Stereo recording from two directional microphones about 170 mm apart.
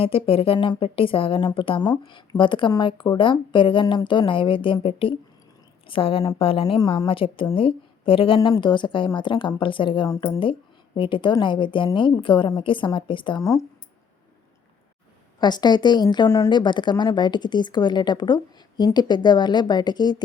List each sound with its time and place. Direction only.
0.0 s a woman's voice: 35° left (ahead or behind)
15.4 s speech: 25° left (ahead or behind)